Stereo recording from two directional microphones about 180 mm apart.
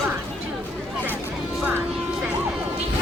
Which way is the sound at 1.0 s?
5° right (ahead or behind).